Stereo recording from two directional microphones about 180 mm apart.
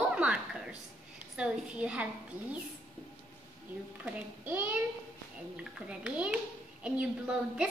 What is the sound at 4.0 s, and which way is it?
Speech, 10° right (ahead or behind).